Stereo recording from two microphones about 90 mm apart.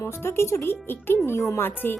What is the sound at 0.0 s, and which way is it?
Speech, 30° left (ahead or behind).